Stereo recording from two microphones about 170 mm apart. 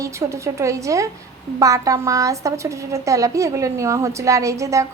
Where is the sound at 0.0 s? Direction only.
15° right (ahead or behind).